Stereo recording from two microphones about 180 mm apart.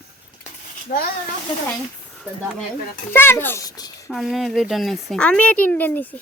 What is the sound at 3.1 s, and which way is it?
Speech, 10° left (ahead or behind).